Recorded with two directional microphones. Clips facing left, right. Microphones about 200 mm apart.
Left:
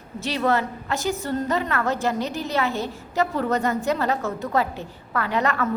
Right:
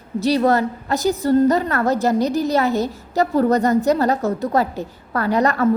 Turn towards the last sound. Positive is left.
turn(degrees=-40)  # may be behind; listen again after turning